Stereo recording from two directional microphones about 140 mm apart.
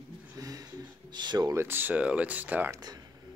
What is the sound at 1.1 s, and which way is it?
Speech, 30° right (ahead or behind).